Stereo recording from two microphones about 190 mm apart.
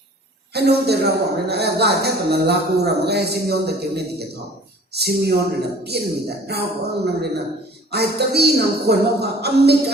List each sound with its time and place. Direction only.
0.5 s speech: 60° right (ahead or behind)